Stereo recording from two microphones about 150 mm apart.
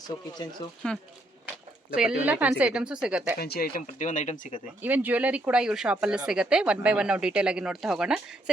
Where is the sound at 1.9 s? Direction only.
10° right (ahead or behind).